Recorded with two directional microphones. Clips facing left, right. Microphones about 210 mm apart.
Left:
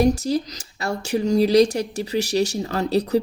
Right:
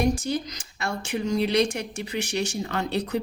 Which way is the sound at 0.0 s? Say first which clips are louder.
Left 5 dB; 40° left (ahead or behind).